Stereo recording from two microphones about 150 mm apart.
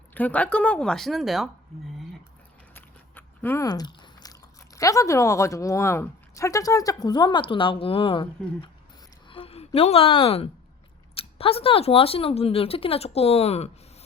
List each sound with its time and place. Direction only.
0.1 s speech: 10° left (ahead or behind)
2.7 s walk: 15° left (ahead or behind)
3.7 s a woman's voice: 30° left (ahead or behind); by 13.7 s 45° left (ahead or behind)